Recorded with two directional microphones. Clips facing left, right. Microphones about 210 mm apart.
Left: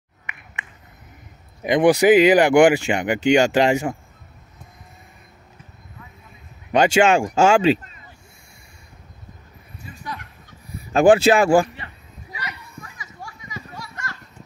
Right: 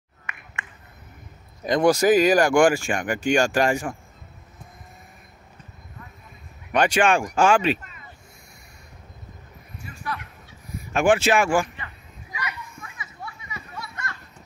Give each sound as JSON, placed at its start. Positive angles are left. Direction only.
{"t": 1.6, "sound": "speech", "side_deg": 15}
{"t": 6.7, "sound": "speech", "side_deg": 25}
{"t": 10.9, "sound": "a sound", "side_deg": 35}